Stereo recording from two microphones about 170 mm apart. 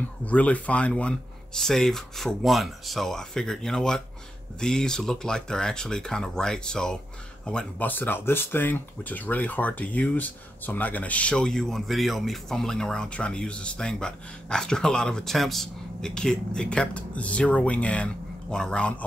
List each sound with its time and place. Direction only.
0.2 s speech: 10° left (ahead or behind)